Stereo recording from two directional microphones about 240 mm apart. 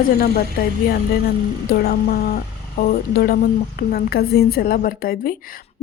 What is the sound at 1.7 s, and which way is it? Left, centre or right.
Speech, left.